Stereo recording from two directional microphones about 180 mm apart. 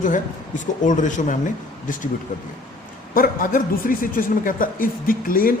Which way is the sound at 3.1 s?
50° left (ahead or behind).